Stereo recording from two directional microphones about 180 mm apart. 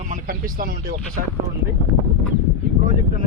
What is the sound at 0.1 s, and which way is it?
Speech, 50° right (ahead or behind).